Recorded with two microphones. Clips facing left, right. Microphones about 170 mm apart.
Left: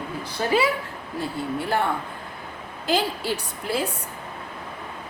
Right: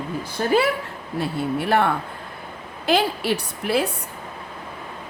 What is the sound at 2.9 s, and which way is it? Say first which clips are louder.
Speech: right 4 dB; 70° right (ahead or behind).